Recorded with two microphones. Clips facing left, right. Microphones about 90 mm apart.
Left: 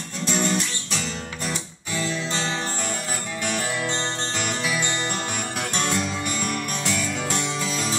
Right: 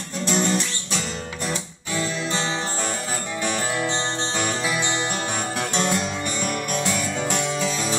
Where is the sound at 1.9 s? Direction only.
20° right (ahead or behind).